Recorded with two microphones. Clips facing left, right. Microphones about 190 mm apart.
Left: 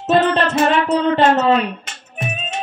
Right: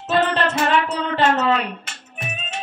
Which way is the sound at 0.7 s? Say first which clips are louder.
Left 5 dB; 25° left (ahead or behind).